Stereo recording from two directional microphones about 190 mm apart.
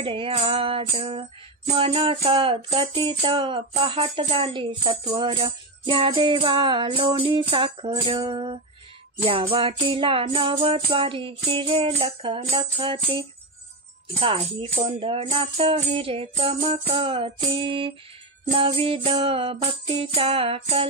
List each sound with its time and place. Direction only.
0.0 s music: 30° right (ahead or behind)
14.2 s music: 30° right (ahead or behind)